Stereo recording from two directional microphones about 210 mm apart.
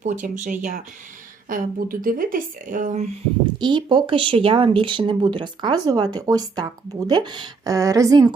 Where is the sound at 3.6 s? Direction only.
20° right (ahead or behind).